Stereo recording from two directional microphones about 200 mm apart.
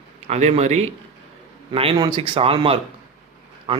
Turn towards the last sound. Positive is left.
turn(degrees=-25)  # may be behind; listen again after turning